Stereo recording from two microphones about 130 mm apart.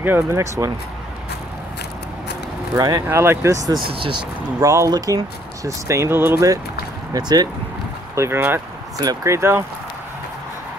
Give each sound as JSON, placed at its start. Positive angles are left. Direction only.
{"t": 0.0, "sound": "speech", "side_deg": -20}
{"t": 2.8, "sound": "speech", "side_deg": -30}
{"t": 3.8, "sound": "speech", "side_deg": -40}
{"t": 4.6, "sound": "speech", "side_deg": -25}
{"t": 8.2, "sound": "speech", "side_deg": -15}